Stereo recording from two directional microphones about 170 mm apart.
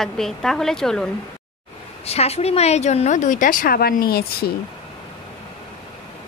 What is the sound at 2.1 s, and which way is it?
Speech, 35° left (ahead or behind).